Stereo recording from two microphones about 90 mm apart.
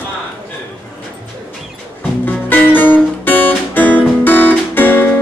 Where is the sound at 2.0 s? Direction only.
20° left (ahead or behind).